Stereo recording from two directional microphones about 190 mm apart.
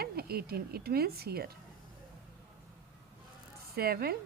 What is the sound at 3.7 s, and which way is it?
Speech, 55° right (ahead or behind).